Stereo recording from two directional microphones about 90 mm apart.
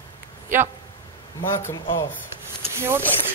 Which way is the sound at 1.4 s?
35° left (ahead or behind).